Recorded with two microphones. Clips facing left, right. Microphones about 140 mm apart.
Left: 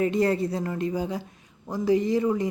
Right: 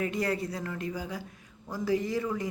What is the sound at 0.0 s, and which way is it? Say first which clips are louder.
Speech: left 7 dB; 25° left (ahead or behind).